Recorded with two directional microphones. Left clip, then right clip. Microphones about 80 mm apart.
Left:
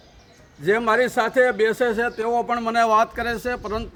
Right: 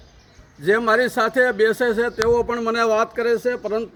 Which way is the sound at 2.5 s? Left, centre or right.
Left.